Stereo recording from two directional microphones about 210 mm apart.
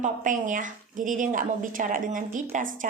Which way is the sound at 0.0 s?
40° right (ahead or behind).